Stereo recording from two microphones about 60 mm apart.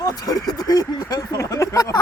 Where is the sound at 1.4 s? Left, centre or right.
Left.